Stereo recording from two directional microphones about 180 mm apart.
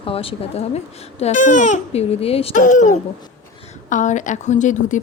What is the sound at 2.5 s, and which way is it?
A woman's voice, 45° left (ahead or behind).